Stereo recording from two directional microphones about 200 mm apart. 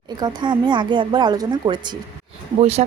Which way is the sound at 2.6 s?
30° right (ahead or behind).